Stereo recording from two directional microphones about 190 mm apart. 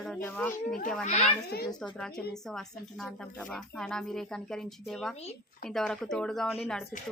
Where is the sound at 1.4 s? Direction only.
55° left (ahead or behind).